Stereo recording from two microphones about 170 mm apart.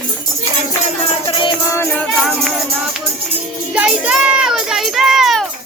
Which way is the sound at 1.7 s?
15° left (ahead or behind).